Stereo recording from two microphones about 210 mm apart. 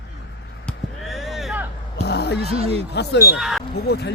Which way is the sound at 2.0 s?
50° left (ahead or behind).